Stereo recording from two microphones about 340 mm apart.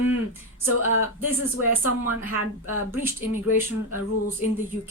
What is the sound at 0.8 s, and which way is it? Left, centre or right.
Speech, left.